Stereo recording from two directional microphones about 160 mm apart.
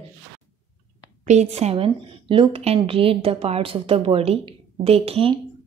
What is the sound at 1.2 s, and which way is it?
A woman's voice, 45° right (ahead or behind).